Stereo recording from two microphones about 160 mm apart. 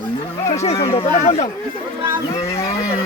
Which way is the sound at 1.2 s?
45° left (ahead or behind).